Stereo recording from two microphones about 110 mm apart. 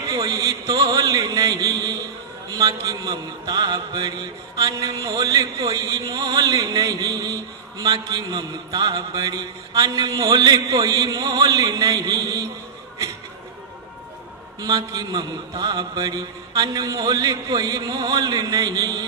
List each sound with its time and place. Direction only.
0.1 s a sound: 30° right (ahead or behind)
2.5 s a man's voice: 30° right (ahead or behind)
14.6 s a man's voice: 35° right (ahead or behind)